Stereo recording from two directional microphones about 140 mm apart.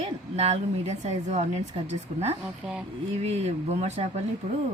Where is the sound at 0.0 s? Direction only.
50° right (ahead or behind).